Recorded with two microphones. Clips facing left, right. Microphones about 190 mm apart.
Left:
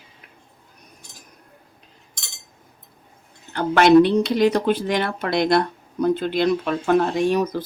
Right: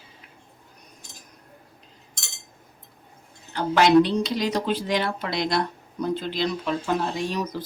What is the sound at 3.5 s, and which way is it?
Speech, 55° left (ahead or behind).